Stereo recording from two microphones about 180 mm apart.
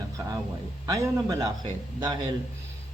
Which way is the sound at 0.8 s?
20° right (ahead or behind).